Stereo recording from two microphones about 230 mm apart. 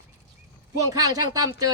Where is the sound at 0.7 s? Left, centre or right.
Centre.